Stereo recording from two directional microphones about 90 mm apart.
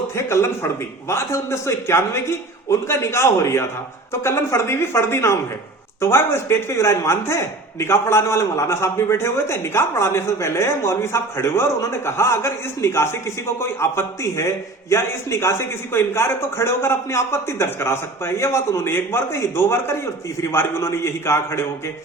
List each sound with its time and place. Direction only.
0.2 s a man's voice: 30° left (ahead or behind)